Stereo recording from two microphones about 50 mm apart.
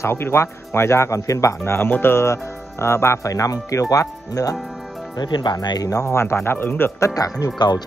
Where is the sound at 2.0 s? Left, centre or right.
Left.